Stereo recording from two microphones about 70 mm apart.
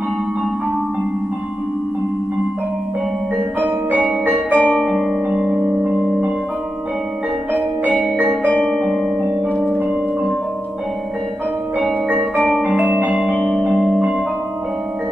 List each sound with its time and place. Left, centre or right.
3.5 s music: right
4.6 s music: centre
4.8 s music: centre
5.3 s music: centre
8.5 s music: centre
11.8 s music: centre
12.7 s music: centre
13.1 s music: centre